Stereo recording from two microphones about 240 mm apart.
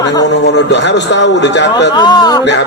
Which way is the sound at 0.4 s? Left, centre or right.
Left.